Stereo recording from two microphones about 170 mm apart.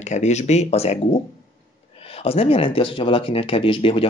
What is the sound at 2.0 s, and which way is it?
Speech, 35° left (ahead or behind).